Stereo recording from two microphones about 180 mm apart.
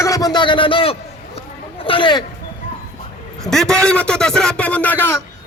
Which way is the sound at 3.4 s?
5° left (ahead or behind).